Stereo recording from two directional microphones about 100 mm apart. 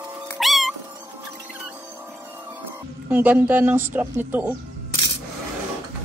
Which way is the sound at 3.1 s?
15° right (ahead or behind).